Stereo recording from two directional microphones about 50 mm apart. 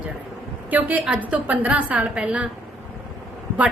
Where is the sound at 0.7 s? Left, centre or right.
Right.